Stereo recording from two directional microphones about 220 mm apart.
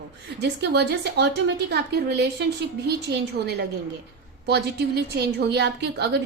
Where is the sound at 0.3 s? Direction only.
50° right (ahead or behind).